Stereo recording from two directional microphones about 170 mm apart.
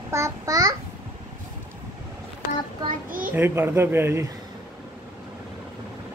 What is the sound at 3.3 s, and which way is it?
Speech, 15° right (ahead or behind).